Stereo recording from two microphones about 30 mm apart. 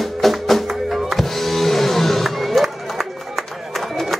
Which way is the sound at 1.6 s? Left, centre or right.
Centre.